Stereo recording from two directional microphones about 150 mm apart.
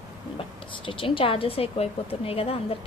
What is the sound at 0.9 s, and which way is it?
A woman's voice, 35° left (ahead or behind).